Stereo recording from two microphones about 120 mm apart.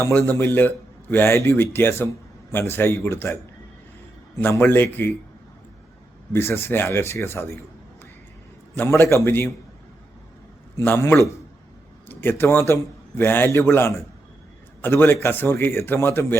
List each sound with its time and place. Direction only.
0.0 s speech: 15° left (ahead or behind)
4.4 s speech: 15° left (ahead or behind)
6.3 s speech: 20° left (ahead or behind)
8.7 s speech: 20° left (ahead or behind)
10.8 s a man's voice: 20° left (ahead or behind)